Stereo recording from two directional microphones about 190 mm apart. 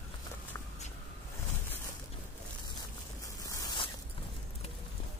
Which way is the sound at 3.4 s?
15° left (ahead or behind).